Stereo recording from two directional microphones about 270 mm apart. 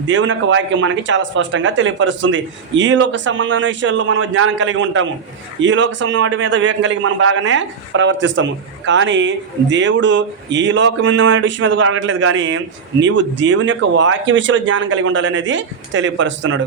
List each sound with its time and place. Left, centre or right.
0.1 s a man's voice: right